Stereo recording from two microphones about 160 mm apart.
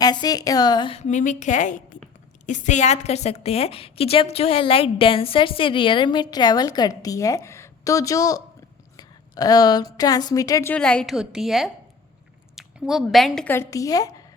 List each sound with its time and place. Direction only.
0.0 s a woman's voice: 25° left (ahead or behind)